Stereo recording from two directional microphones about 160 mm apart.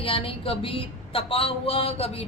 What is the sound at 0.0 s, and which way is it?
A woman's voice, 35° left (ahead or behind).